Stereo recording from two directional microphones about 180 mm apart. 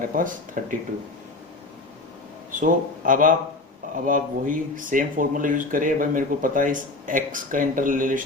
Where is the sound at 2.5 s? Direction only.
50° right (ahead or behind).